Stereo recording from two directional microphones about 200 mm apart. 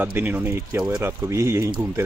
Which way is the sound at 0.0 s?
10° right (ahead or behind).